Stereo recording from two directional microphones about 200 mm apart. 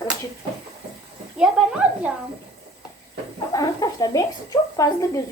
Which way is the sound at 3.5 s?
20° left (ahead or behind).